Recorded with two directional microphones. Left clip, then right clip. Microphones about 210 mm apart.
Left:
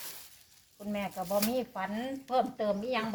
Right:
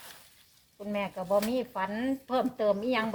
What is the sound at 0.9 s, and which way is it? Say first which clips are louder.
Speech: right 4 dB; 45° right (ahead or behind).